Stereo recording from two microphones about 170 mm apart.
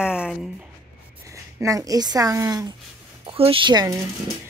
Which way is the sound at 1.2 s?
20° right (ahead or behind).